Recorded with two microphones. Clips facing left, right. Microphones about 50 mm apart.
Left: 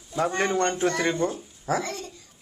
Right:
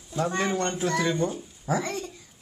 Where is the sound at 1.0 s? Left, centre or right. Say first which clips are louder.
Left 1 dB; left.